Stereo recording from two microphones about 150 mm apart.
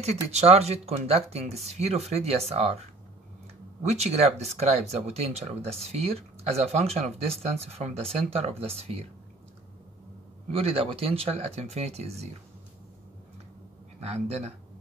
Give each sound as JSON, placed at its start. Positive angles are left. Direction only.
{"t": 0.0, "sound": "speech", "side_deg": -45}
{"t": 3.8, "sound": "speech", "side_deg": -45}
{"t": 10.5, "sound": "speech", "side_deg": -40}
{"t": 13.9, "sound": "speech", "side_deg": -45}